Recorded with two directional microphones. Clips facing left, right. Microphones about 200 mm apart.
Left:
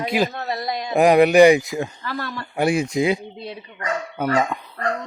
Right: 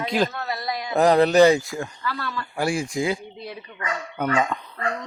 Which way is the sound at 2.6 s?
20° left (ahead or behind).